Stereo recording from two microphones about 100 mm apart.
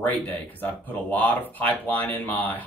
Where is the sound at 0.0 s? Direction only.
15° left (ahead or behind).